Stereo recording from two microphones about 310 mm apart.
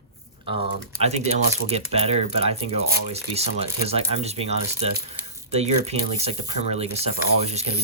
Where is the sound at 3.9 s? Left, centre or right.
Centre.